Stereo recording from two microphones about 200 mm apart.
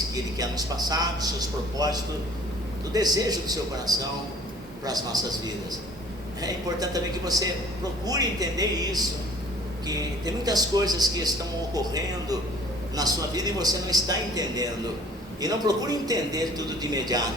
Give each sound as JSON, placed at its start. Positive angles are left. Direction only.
{"t": 0.1, "sound": "a man's voice", "side_deg": -20}
{"t": 6.4, "sound": "a man's voice", "side_deg": -20}